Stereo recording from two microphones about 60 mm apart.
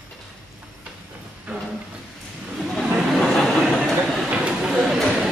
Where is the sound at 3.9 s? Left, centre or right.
Centre.